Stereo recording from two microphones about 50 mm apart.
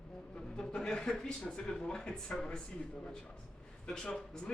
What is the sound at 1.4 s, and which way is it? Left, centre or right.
A man's voice, left.